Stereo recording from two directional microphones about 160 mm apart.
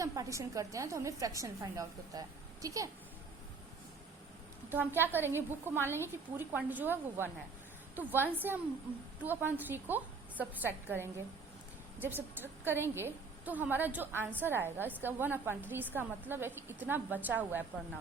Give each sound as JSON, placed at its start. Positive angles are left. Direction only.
{"t": 0.0, "sound": "a woman's voice", "side_deg": -20}
{"t": 4.7, "sound": "a woman's voice", "side_deg": -10}